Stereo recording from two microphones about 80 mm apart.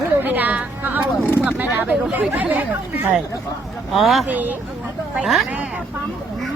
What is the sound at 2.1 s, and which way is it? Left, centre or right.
Speech, right.